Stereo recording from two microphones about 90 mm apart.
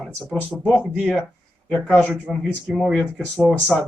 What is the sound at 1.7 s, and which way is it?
Speech, 15° left (ahead or behind).